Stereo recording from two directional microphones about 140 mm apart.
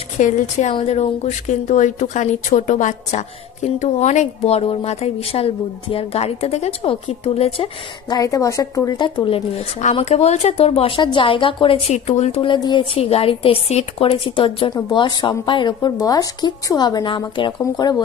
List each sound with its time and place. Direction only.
0.2 s a woman's voice: 60° left (ahead or behind); by 7.7 s 45° left (ahead or behind)
8.1 s speech: 25° left (ahead or behind)
11.9 s speech: 55° left (ahead or behind)
12.5 s speech: 35° left (ahead or behind)